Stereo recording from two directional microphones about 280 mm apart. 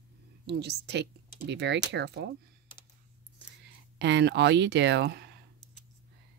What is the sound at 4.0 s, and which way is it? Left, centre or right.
Speech, right.